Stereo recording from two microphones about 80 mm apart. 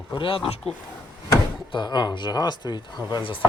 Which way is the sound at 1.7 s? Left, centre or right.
Left.